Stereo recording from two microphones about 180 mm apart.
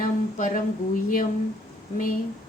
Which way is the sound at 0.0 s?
50° left (ahead or behind).